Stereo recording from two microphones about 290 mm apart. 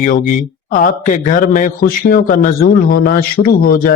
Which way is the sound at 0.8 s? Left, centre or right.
Left.